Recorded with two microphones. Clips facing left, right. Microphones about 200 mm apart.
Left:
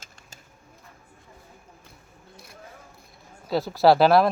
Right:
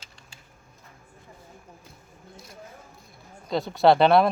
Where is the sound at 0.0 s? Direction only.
45° left (ahead or behind).